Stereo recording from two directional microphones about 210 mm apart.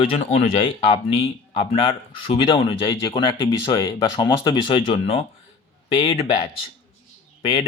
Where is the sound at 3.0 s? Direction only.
20° left (ahead or behind).